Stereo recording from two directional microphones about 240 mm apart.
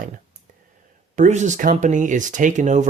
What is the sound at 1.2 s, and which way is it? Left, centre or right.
Speech, right.